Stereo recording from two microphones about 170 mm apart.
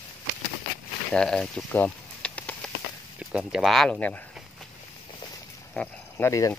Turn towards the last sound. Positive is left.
turn(degrees=15)  # may be behind; listen again after turning